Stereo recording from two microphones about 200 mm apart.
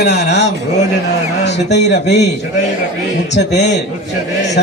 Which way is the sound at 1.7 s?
60° left (ahead or behind).